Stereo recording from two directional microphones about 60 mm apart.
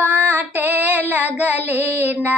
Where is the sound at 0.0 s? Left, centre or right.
Right.